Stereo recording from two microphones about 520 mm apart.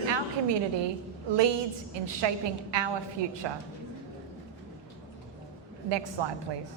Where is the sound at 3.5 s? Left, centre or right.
Right.